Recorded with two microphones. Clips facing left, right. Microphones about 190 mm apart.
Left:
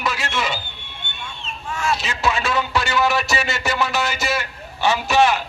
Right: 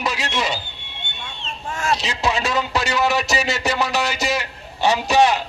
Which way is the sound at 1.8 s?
35° right (ahead or behind).